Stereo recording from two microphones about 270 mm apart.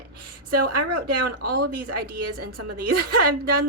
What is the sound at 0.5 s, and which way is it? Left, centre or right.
A woman's voice, right.